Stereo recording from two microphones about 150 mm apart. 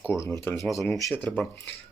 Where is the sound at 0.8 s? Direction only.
15° left (ahead or behind).